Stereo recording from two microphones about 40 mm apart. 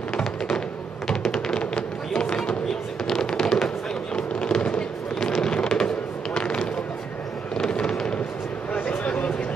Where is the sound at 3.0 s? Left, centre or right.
Centre.